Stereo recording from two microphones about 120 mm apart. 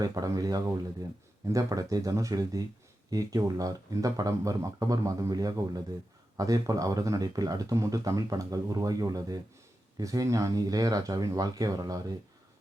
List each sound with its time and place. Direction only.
0.0 s speech: 30° right (ahead or behind)